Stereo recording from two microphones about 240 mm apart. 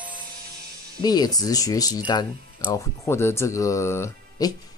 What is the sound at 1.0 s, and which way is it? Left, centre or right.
Speech, centre.